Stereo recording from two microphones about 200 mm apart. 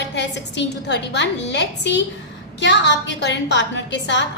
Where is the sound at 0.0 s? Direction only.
60° left (ahead or behind).